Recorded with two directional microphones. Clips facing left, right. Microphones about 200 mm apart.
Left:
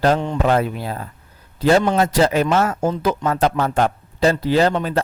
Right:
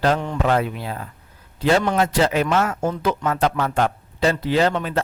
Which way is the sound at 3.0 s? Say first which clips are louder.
Left 1 dB; 35° left (ahead or behind).